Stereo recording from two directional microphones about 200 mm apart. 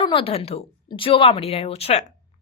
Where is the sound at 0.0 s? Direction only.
25° left (ahead or behind).